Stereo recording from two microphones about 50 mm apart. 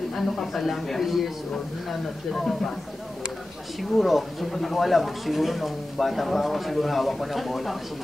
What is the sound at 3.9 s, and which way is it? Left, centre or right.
Speech, centre.